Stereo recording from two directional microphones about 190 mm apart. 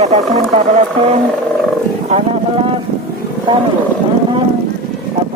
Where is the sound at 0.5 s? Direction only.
35° right (ahead or behind).